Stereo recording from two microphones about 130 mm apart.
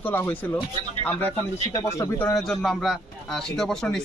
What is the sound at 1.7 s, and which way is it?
Speech, 25° left (ahead or behind).